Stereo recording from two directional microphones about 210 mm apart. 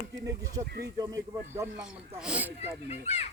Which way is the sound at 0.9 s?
15° right (ahead or behind).